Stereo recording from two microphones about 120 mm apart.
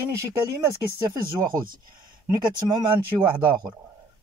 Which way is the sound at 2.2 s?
40° right (ahead or behind).